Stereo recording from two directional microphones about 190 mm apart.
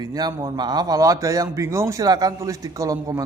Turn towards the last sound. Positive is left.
turn(degrees=-15)  # may be behind; listen again after turning